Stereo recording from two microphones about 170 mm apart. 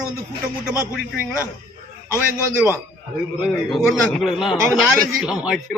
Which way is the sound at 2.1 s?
15° left (ahead or behind).